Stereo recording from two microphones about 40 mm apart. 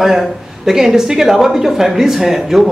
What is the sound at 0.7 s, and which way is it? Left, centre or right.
Speech, centre.